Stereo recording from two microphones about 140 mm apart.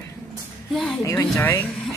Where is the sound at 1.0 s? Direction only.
15° left (ahead or behind).